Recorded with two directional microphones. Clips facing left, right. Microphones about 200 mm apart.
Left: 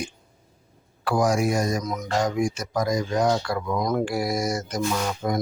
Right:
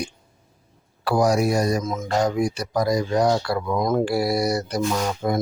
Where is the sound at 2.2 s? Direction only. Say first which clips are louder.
Right 2 dB; 35° right (ahead or behind).